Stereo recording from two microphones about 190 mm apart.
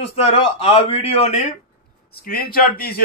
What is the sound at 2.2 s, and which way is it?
Speech, 50° left (ahead or behind).